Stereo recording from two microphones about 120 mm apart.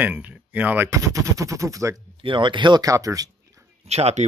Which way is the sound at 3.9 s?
60° right (ahead or behind).